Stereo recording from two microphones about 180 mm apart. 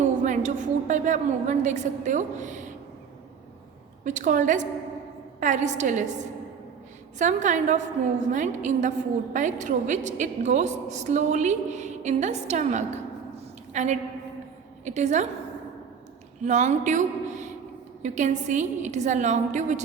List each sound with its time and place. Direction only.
0.2 s a woman's voice: 45° right (ahead or behind)
4.0 s a woman's voice: 45° right (ahead or behind)
7.2 s a woman's voice: 40° right (ahead or behind)
16.4 s a woman's voice: 40° right (ahead or behind)